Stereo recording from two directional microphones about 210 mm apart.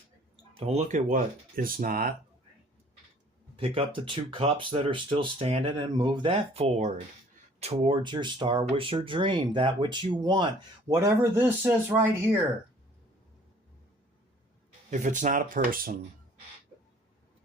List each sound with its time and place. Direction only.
0.5 s speech: 30° right (ahead or behind); by 2.1 s 45° right (ahead or behind)
3.5 s speech: 25° right (ahead or behind); by 12.1 s 10° right (ahead or behind)
14.8 s speech: 35° right (ahead or behind)